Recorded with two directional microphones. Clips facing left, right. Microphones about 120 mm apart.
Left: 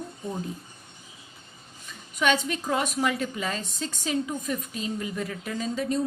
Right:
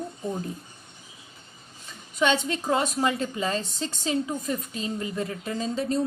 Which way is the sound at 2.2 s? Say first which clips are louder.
Right 1 dB; 25° right (ahead or behind).